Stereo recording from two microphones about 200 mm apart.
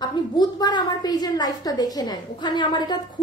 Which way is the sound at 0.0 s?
20° left (ahead or behind).